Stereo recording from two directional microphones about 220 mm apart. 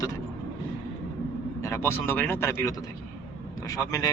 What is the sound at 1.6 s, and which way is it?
Speech, 15° left (ahead or behind).